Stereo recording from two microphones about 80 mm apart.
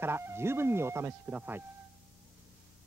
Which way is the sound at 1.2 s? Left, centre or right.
Right.